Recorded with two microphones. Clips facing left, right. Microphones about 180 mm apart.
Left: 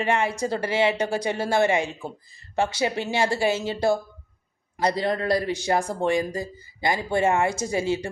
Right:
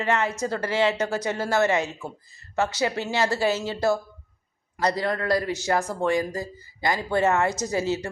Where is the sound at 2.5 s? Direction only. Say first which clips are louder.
Left 1 dB; 30° left (ahead or behind).